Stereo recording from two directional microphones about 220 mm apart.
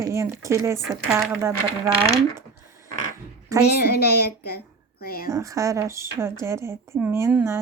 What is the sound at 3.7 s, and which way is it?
A woman's voice, 45° left (ahead or behind).